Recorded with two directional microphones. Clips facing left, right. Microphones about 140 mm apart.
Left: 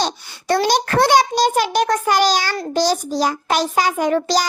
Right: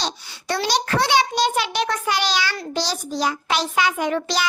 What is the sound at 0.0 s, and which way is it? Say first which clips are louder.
A child's voice: left 6 dB; 45° left (ahead or behind).